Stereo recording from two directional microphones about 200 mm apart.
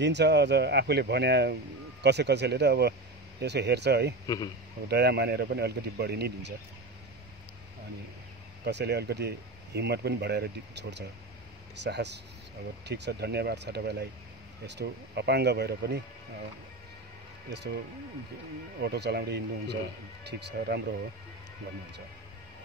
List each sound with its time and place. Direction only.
0.0 s speech: 60° right (ahead or behind)
8.6 s speech: 55° right (ahead or behind)
18.8 s speech: 55° right (ahead or behind)